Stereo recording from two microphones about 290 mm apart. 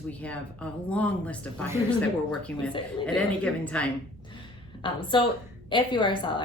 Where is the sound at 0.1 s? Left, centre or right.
Centre.